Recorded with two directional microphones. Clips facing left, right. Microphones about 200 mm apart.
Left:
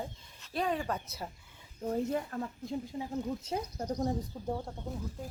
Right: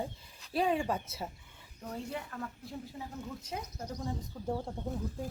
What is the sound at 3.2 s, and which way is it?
Speech, 30° left (ahead or behind).